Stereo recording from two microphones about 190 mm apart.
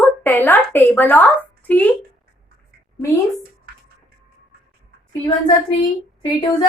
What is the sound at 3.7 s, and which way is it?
Music, 50° right (ahead or behind).